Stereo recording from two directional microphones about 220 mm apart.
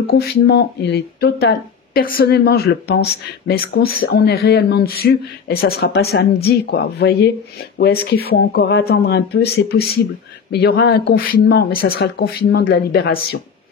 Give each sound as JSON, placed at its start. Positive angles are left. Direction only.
{"t": 0.0, "sound": "speech", "side_deg": 45}